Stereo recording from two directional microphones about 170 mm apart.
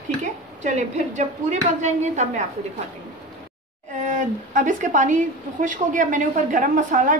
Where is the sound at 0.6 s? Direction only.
45° right (ahead or behind).